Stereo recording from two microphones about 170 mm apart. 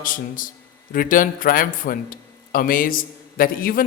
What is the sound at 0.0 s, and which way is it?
Speech, 55° left (ahead or behind).